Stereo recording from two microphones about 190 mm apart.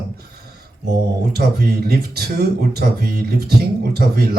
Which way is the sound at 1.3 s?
55° right (ahead or behind).